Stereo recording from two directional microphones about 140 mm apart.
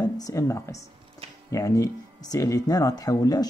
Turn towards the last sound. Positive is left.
turn(degrees=25)  # may be behind; listen again after turning